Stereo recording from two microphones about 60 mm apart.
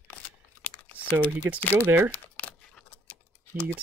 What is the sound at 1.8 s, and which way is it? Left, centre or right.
Speech, right.